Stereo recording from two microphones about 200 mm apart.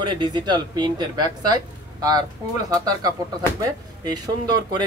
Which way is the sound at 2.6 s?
20° right (ahead or behind).